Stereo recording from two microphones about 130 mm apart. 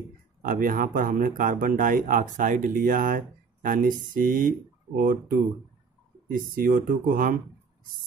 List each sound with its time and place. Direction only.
0.4 s speech: 90° right